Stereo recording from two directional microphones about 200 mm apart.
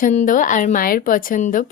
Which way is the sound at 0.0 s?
40° left (ahead or behind).